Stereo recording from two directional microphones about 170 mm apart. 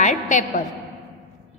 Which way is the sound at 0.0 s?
45° left (ahead or behind).